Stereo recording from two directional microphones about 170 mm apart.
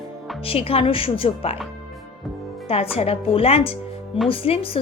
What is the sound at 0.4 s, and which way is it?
Speech, 35° left (ahead or behind).